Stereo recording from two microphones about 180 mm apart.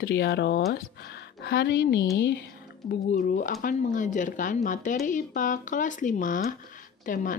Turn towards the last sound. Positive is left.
turn(degrees=50)  # may be behind; listen again after turning